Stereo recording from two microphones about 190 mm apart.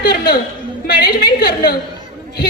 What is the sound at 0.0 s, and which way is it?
A woman's voice, 50° left (ahead or behind).